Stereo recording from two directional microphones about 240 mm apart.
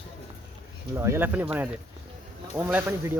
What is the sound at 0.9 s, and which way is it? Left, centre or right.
Speech, centre.